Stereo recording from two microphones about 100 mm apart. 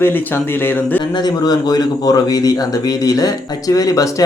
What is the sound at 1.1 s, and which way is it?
Speech, 40° left (ahead or behind).